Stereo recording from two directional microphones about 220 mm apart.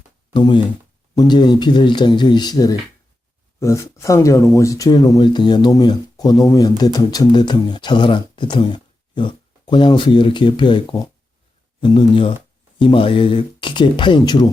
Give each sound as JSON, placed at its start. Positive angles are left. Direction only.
{"t": 0.3, "sound": "speech", "side_deg": 20}